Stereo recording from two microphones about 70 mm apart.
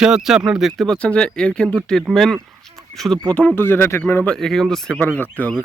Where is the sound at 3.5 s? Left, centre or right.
Left.